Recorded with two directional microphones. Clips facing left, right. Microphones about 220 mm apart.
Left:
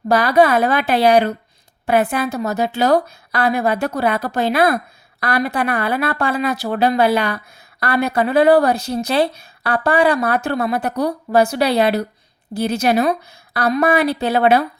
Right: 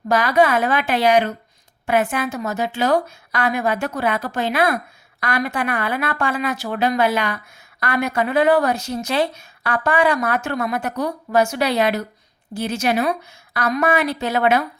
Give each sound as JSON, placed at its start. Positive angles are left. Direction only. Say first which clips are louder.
{"t": 0.1, "sound": "speech", "louder": "left 3 dB", "side_deg": 35}